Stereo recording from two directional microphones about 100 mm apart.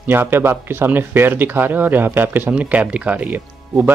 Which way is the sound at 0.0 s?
20° right (ahead or behind).